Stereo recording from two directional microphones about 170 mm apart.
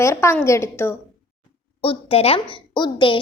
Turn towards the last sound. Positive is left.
turn(degrees=25)  # may be behind; listen again after turning